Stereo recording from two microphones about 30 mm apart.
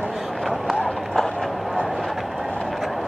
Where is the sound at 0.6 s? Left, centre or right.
Centre.